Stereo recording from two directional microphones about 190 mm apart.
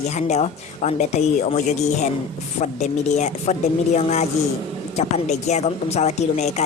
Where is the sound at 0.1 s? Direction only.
35° left (ahead or behind).